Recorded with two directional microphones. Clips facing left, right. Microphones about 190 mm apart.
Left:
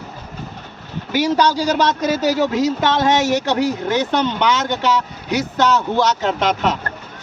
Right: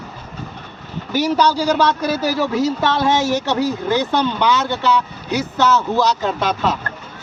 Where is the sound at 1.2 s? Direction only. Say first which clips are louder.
Right 1 dB; 15° left (ahead or behind).